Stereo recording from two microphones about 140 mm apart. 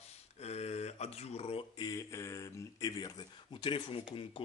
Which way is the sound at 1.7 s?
25° left (ahead or behind).